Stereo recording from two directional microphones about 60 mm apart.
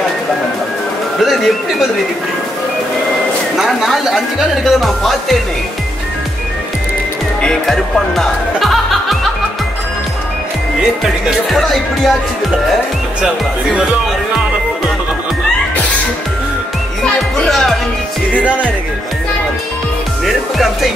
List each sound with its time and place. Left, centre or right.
1.2 s speech: centre
3.5 s speech: centre
7.4 s music: centre
11.5 s speech: centre
17.4 s music: centre
20.2 s speech: centre